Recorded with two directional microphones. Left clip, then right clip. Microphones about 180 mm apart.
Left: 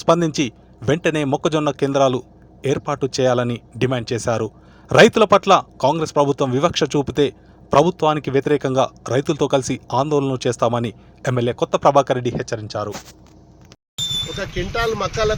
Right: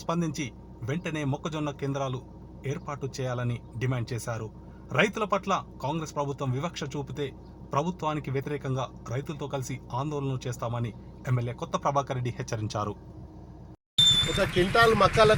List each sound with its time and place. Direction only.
0.0 s a man's voice: 45° left (ahead or behind); by 12.9 s 20° left (ahead or behind)
14.7 s speech: centre (ahead or behind)